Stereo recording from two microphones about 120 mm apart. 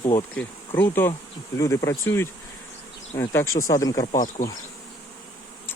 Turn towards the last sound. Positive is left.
turn(degrees=90)